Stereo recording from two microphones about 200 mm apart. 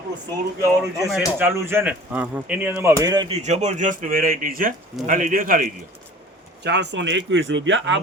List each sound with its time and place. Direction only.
0.6 s a man's voice: 15° right (ahead or behind); by 5.7 s 40° right (ahead or behind)
6.6 s speech: 60° right (ahead or behind)